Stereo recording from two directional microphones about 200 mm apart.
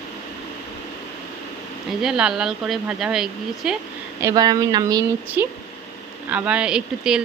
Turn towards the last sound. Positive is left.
turn(degrees=-5)  # may be behind; listen again after turning